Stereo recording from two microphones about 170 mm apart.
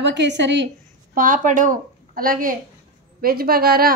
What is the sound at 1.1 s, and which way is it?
A woman's voice, 55° right (ahead or behind).